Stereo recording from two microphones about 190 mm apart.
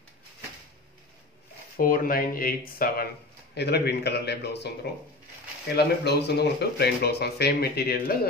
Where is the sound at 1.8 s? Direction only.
50° left (ahead or behind).